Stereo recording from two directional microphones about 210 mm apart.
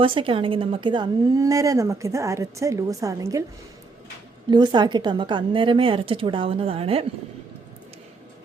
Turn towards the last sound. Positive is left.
turn(degrees=-25)  # may be behind; listen again after turning